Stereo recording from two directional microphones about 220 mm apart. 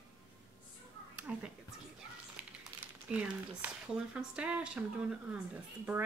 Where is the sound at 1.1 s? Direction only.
5° right (ahead or behind).